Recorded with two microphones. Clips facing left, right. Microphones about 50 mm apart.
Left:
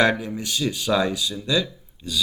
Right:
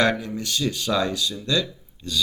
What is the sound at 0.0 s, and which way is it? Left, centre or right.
A man's voice, centre.